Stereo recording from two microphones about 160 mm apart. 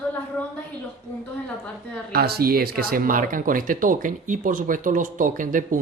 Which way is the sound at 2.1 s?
75° right (ahead or behind).